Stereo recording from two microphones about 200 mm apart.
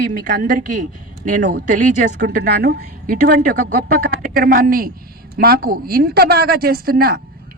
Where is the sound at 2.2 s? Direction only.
50° right (ahead or behind).